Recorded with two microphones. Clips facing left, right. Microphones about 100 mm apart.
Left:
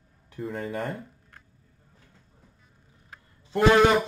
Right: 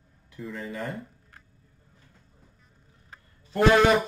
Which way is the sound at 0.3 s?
55° left (ahead or behind).